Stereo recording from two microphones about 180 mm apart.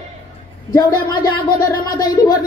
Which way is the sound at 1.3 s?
25° left (ahead or behind).